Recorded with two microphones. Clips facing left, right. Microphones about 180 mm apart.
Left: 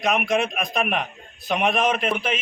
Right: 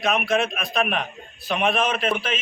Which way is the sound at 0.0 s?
15° left (ahead or behind).